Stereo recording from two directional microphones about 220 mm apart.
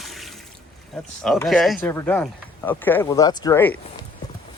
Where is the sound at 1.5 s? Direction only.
Centre (ahead or behind).